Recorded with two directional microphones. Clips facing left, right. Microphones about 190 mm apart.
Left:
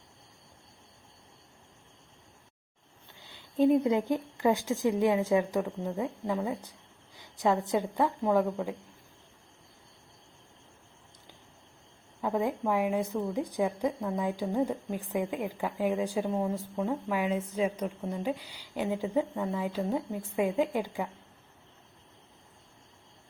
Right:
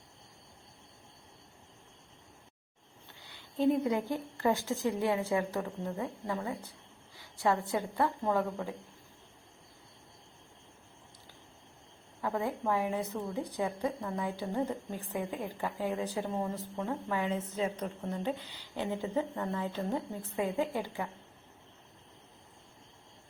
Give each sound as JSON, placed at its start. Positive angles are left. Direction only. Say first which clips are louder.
{"t": 3.3, "sound": "a woman's voice", "louder": "left 4 dB", "side_deg": 20}
{"t": 12.2, "sound": "a woman's voice", "louder": "left 4 dB", "side_deg": 15}